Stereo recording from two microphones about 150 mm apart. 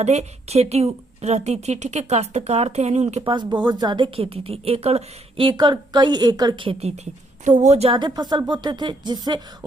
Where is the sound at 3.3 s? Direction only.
30° right (ahead or behind).